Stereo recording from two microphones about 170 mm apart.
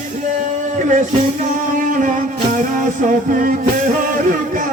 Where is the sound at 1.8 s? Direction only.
50° right (ahead or behind).